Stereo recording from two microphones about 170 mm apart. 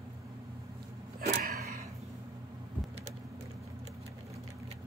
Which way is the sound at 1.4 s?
60° right (ahead or behind).